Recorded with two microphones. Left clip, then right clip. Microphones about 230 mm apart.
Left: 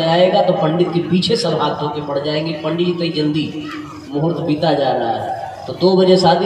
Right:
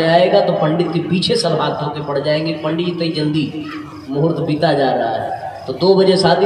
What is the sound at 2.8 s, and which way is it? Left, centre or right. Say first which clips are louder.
Speech: left 1 dB; right.